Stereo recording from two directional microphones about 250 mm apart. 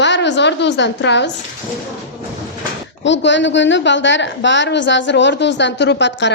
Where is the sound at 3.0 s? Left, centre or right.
Left.